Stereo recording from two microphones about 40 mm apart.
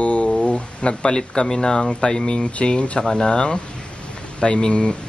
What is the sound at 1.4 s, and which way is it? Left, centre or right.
Speech, centre.